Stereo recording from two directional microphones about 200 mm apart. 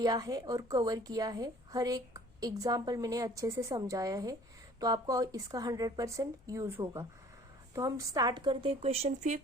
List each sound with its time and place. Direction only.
0.0 s a woman's voice: 20° right (ahead or behind); by 9.4 s 35° right (ahead or behind)